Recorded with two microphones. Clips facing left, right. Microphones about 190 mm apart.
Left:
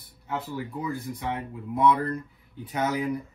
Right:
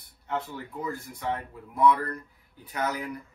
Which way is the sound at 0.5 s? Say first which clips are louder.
Left 3 dB; 15° left (ahead or behind).